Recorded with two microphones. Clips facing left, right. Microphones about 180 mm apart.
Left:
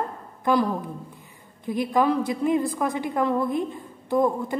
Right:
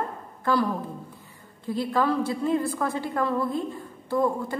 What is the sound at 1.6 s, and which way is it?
A woman's voice, 15° left (ahead or behind).